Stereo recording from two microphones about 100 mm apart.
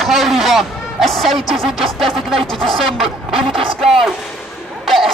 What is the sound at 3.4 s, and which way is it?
Speech, 60° right (ahead or behind).